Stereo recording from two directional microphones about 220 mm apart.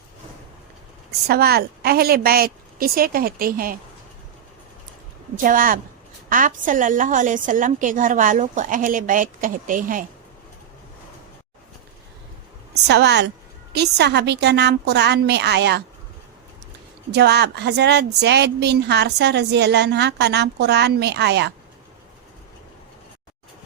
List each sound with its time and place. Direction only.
1.3 s a woman's voice: 45° right (ahead or behind)
5.4 s a woman's voice: 40° right (ahead or behind)
12.9 s a woman's voice: 50° right (ahead or behind)
17.1 s a woman's voice: 50° right (ahead or behind)